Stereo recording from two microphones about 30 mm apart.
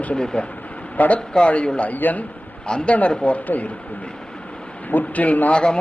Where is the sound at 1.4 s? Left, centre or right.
Left.